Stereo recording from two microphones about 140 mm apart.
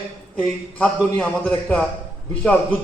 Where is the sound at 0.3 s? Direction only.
10° left (ahead or behind).